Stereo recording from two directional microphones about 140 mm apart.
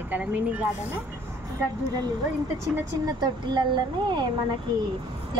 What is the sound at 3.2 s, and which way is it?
Speech, 35° right (ahead or behind).